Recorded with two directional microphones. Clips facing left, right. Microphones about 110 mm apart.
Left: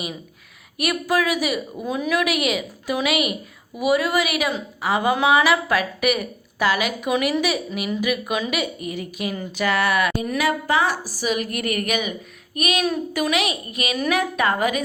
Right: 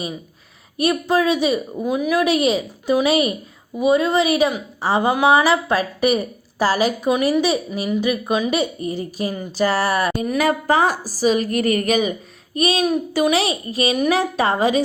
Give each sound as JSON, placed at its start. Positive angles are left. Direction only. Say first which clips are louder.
{"t": 0.8, "sound": "a woman's voice", "louder": "right 4 dB", "side_deg": -30}
{"t": 1.7, "sound": "a woman's voice", "louder": "right 4 dB", "side_deg": -15}